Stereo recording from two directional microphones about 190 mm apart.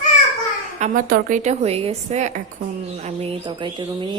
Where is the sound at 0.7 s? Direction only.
40° right (ahead or behind).